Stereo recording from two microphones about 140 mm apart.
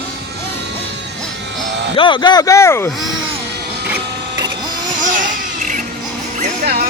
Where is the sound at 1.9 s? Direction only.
35° left (ahead or behind); by 2.9 s 20° left (ahead or behind).